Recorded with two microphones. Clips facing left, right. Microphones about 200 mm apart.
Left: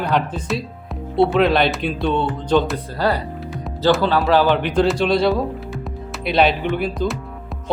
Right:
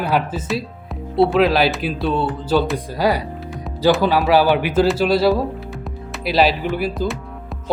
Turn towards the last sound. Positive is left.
turn(degrees=0)  # may be behind; listen again after turning